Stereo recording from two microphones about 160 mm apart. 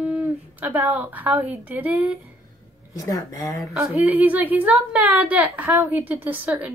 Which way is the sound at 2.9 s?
20° left (ahead or behind).